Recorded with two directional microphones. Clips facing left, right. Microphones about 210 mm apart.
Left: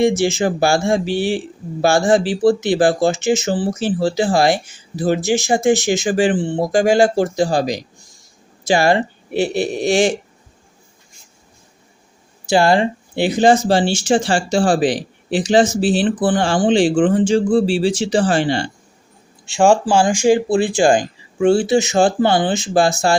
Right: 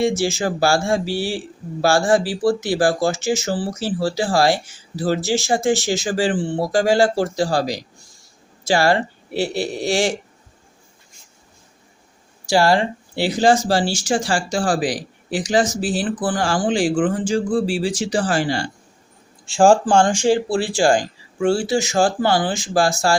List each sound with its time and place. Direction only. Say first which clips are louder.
0.2 s speech: left 3 dB; 20° left (ahead or behind)
12.5 s speech: left 2 dB; 20° left (ahead or behind)
19.5 s speech: even; centre (ahead or behind); by 23.1 s 20° left (ahead or behind)